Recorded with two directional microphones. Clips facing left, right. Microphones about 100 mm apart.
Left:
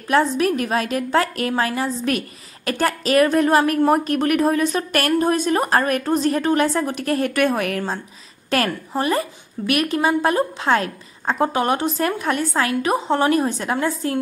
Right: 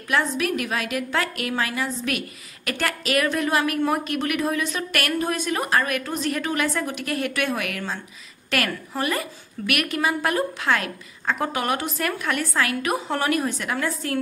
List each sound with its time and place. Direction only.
0.1 s a woman's voice: 35° left (ahead or behind)